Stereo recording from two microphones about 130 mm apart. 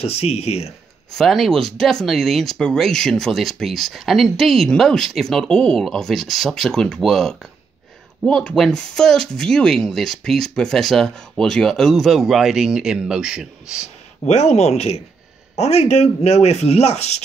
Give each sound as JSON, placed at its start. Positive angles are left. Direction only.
{"t": 0.0, "sound": "speech", "side_deg": 50}
{"t": 1.1, "sound": "speech", "side_deg": 0}
{"t": 14.2, "sound": "speech", "side_deg": 55}